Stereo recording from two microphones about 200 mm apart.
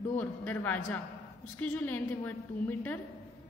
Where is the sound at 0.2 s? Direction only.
10° left (ahead or behind).